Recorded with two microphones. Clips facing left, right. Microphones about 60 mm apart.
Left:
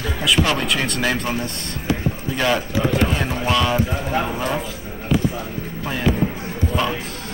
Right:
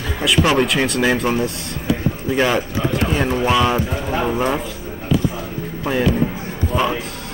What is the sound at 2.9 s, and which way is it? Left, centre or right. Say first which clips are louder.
Speech: right 2 dB; centre.